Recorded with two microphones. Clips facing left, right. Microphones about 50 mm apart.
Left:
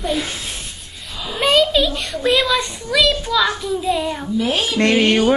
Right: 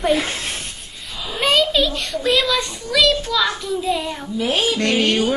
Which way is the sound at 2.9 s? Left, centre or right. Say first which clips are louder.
Left 1 dB; centre.